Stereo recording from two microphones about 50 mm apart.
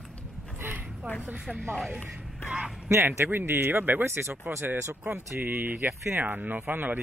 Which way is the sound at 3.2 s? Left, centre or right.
Right.